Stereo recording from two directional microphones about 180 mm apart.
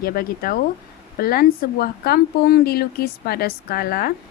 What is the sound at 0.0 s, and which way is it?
A woman's voice, 55° left (ahead or behind).